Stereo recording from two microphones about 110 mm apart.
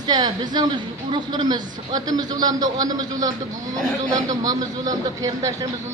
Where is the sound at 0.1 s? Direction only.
40° right (ahead or behind).